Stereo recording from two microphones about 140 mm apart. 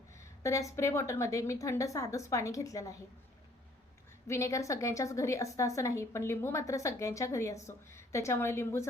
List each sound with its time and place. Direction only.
0.2 s a woman's voice: 20° left (ahead or behind)
4.3 s a woman's voice: 20° left (ahead or behind)